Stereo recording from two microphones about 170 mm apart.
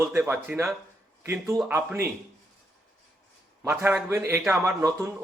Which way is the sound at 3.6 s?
15° right (ahead or behind).